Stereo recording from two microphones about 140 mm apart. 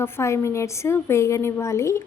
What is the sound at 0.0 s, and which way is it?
Speech, 20° left (ahead or behind).